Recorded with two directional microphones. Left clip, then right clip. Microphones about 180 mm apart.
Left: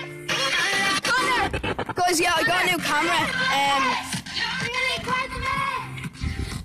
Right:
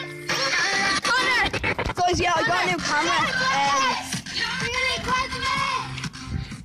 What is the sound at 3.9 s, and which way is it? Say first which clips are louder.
Music: even; 30° right (ahead or behind).